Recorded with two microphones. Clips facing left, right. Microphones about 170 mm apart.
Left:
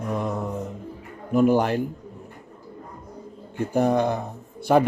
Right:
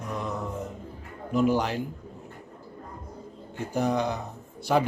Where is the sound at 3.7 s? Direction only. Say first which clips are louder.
Left 5 dB; 55° left (ahead or behind).